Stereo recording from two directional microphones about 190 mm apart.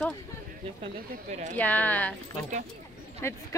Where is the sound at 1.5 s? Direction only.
10° left (ahead or behind).